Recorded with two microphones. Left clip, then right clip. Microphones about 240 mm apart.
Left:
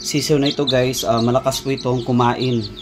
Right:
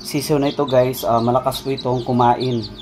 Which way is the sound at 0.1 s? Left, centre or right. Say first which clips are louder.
Left 1 dB; left.